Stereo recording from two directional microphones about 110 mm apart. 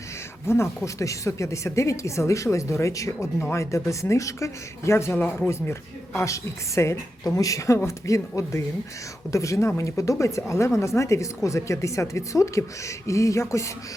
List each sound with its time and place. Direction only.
0.4 s a woman's voice: 25° left (ahead or behind)